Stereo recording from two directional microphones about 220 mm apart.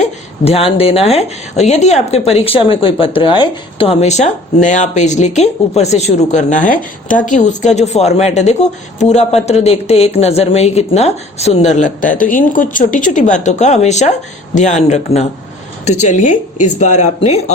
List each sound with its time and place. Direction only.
0.4 s a woman's voice: 25° left (ahead or behind)